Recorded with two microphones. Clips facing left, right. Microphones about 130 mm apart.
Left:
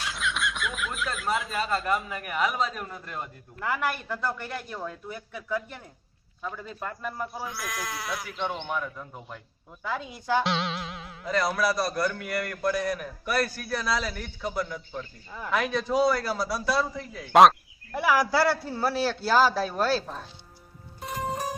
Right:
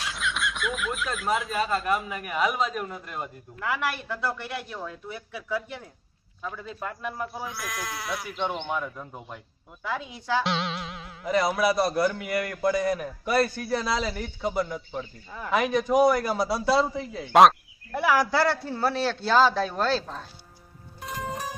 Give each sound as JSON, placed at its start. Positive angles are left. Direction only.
{"t": 0.0, "sound": "speech", "side_deg": 0}
{"t": 3.6, "sound": "a man's voice", "side_deg": 0}
{"t": 8.3, "sound": "a man's voice", "side_deg": -20}
{"t": 10.4, "sound": "music", "side_deg": 0}
{"t": 11.3, "sound": "a man's voice", "side_deg": -20}
{"t": 17.3, "sound": "a man's voice", "side_deg": 0}